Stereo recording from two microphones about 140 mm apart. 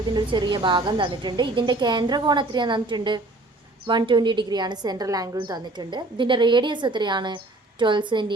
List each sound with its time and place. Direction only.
0.1 s a woman's voice: 35° right (ahead or behind)